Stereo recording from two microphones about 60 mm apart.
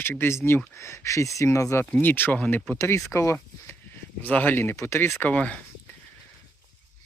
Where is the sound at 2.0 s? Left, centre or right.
Left.